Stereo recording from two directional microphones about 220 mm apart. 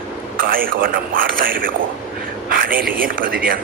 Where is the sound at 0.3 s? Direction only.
40° right (ahead or behind).